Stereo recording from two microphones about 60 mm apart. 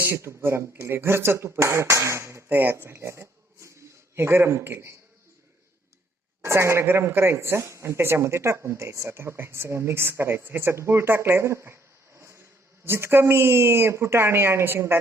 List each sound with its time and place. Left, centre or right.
0.3 s speech: right
2.5 s speech: right
2.7 s speech: right
6.4 s speech: right
7.0 s speech: right
12.8 s speech: right